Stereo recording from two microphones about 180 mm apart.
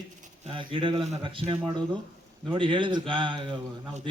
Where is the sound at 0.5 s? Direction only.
30° right (ahead or behind).